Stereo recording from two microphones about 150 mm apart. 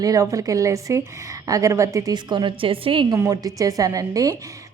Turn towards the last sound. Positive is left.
turn(degrees=-25)  # may be behind; listen again after turning